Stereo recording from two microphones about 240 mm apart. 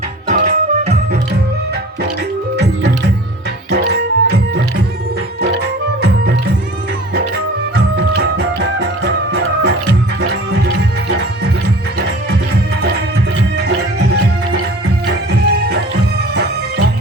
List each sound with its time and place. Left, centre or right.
0.3 s music: right
2.6 s music: right
8.8 s music: right
15.0 s music: right